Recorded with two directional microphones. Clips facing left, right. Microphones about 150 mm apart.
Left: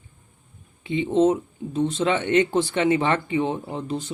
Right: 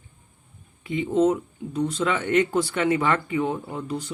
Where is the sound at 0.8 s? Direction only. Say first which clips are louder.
Left 2 dB; 25° left (ahead or behind).